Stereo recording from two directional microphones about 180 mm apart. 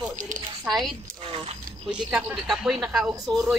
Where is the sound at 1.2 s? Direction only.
35° right (ahead or behind).